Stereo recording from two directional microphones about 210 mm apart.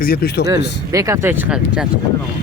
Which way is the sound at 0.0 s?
45° left (ahead or behind).